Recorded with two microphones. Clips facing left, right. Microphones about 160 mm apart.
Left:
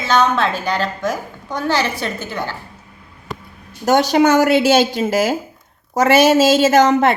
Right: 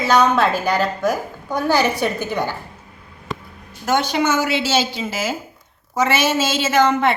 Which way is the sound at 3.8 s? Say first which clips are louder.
Left 6 dB; 40° left (ahead or behind).